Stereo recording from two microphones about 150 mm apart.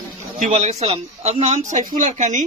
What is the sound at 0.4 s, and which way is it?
A man's voice, 50° right (ahead or behind).